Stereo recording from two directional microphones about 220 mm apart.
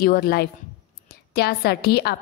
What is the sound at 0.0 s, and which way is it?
A woman's voice, 45° left (ahead or behind).